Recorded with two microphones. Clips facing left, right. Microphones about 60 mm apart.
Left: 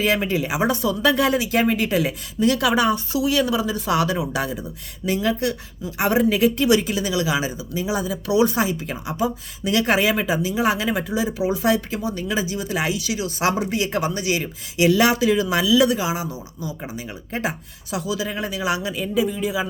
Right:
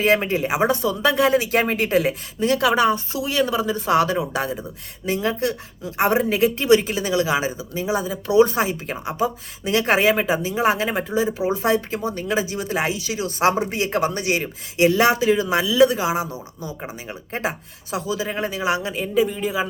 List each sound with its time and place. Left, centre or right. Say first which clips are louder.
0.0 s speech: right 2 dB; right
1.4 s speech: even; right
14.4 s speech: even; right